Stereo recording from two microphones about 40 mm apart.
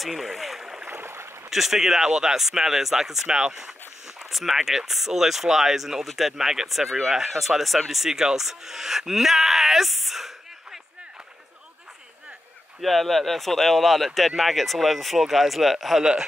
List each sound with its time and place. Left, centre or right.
0.0 s speech: centre
0.8 s boat: right
1.5 s speech: centre
4.2 s speech: centre
12.8 s speech: centre
16.0 s speech: centre